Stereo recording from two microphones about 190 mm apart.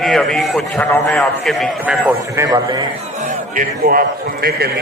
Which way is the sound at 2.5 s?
25° right (ahead or behind).